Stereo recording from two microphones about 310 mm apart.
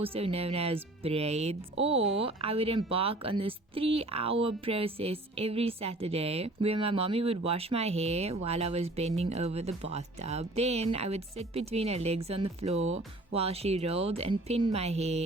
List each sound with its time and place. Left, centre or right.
0.0 s speech: centre